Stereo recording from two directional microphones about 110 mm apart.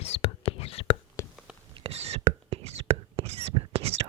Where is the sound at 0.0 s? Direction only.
65° left (ahead or behind).